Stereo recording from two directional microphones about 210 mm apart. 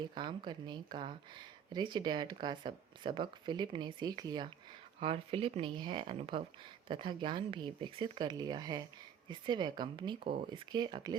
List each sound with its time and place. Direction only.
0.1 s speech: 20° right (ahead or behind)